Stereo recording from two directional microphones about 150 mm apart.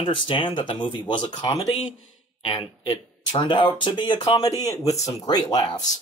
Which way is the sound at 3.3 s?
30° left (ahead or behind).